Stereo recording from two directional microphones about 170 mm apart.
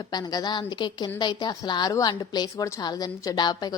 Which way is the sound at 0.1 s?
25° left (ahead or behind).